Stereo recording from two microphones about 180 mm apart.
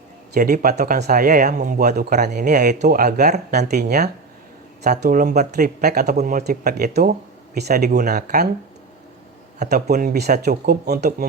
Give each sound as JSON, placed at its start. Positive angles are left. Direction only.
{"t": 0.3, "sound": "speech", "side_deg": -50}
{"t": 0.9, "sound": "speech", "side_deg": -55}
{"t": 3.7, "sound": "speech", "side_deg": -60}
{"t": 4.9, "sound": "speech", "side_deg": -45}
{"t": 9.9, "sound": "speech", "side_deg": -55}